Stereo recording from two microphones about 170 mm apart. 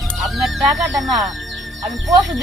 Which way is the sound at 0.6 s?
20° right (ahead or behind).